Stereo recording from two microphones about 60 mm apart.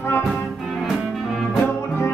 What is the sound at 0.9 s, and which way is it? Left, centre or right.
Music, centre.